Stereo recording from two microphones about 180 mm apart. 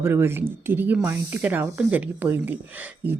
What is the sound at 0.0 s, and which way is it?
Speech, 15° right (ahead or behind).